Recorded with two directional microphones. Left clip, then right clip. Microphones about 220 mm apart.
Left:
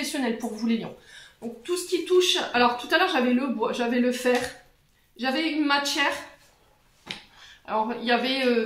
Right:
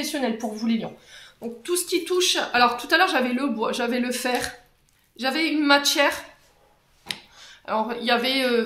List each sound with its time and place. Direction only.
0.0 s a woman's voice: 40° right (ahead or behind)
7.6 s speech: 50° right (ahead or behind)